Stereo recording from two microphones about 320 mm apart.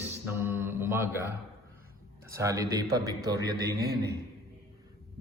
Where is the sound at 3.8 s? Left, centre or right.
Right.